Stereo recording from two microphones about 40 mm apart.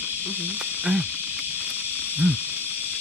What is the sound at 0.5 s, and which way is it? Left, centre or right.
Cricket, right.